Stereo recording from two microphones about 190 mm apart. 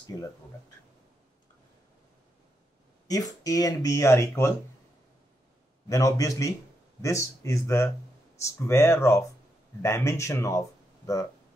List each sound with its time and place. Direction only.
0.0 s speech: 20° left (ahead or behind)
3.1 s speech: 20° left (ahead or behind)
5.9 s speech: 20° left (ahead or behind)